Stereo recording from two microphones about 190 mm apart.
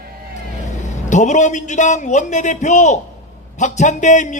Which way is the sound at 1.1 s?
40° left (ahead or behind).